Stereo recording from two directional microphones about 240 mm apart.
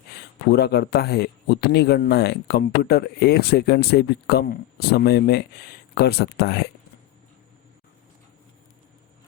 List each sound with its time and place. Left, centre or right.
0.5 s speech: left